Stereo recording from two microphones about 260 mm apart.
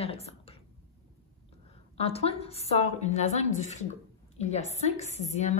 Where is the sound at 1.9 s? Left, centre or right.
Left.